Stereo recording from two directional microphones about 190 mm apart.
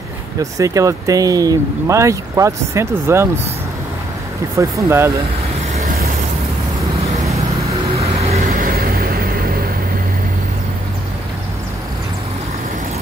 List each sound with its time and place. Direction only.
0.4 s speech: 15° right (ahead or behind)
4.6 s speech: 15° right (ahead or behind)
8.0 s vehicle: 30° right (ahead or behind)
8.4 s vehicle: 50° right (ahead or behind)